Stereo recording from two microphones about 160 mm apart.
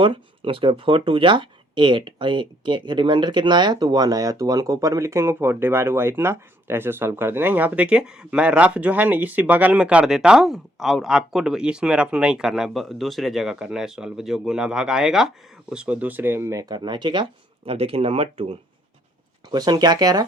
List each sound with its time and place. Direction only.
0.0 s speech: 30° right (ahead or behind)
19.5 s speech: 25° right (ahead or behind)